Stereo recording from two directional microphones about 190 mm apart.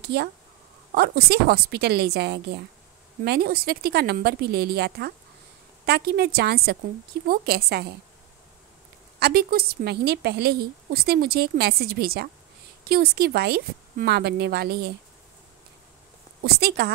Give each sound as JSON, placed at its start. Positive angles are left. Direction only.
{"t": 0.0, "sound": "a woman's voice", "side_deg": -60}
{"t": 9.2, "sound": "a woman's voice", "side_deg": -55}
{"t": 16.4, "sound": "speech", "side_deg": -55}